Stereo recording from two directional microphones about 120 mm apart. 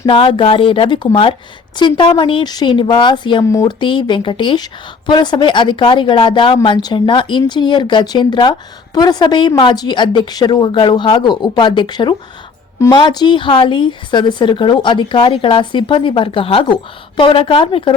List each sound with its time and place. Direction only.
0.0 s a woman's voice: 45° left (ahead or behind)